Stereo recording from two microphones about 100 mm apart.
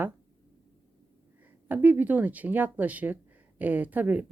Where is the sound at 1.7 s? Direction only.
20° right (ahead or behind).